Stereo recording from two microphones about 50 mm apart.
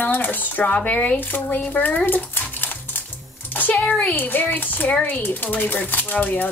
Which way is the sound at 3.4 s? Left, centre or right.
Left.